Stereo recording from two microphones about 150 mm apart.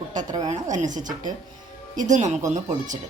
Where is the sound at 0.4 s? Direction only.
50° right (ahead or behind).